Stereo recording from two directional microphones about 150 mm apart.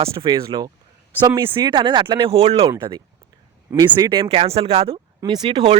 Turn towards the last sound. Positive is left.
turn(degrees=-30)  # may be behind; listen again after turning